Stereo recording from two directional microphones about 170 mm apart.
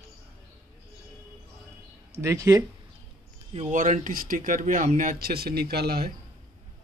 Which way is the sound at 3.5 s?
45° right (ahead or behind).